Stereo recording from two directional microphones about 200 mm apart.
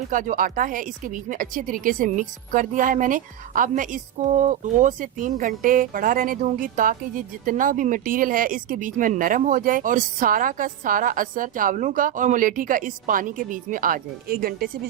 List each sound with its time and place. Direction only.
0.1 s speech: 40° right (ahead or behind)